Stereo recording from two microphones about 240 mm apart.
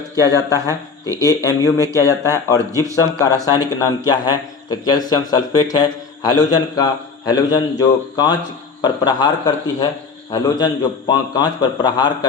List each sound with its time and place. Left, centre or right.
0.3 s a man's voice: centre
10.3 s a man's voice: centre